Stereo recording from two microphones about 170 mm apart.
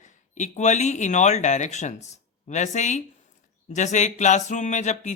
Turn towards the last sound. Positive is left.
turn(degrees=45)  # may be behind; listen again after turning